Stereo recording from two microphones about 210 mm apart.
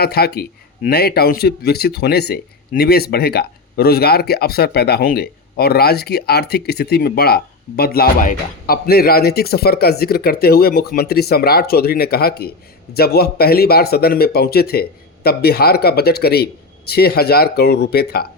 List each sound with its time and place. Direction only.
0.0 s a man's voice: 50° left (ahead or behind)